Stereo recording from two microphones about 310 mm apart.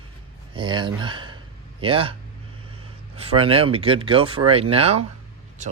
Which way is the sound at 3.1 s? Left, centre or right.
Centre.